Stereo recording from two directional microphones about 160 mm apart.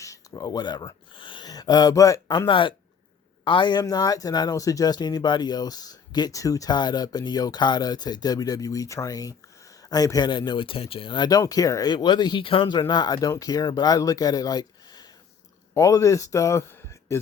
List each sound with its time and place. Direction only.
0.0 s speech: 20° left (ahead or behind)